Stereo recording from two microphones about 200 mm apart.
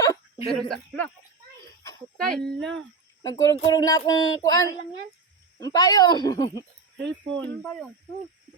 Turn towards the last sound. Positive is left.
turn(degrees=5)  # may be behind; listen again after turning